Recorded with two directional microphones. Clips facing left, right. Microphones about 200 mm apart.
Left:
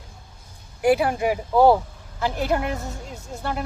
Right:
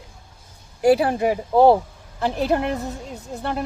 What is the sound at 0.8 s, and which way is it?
Speech, 35° right (ahead or behind).